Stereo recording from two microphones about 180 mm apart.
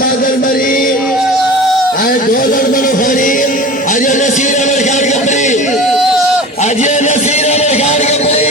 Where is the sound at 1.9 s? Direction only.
50° left (ahead or behind).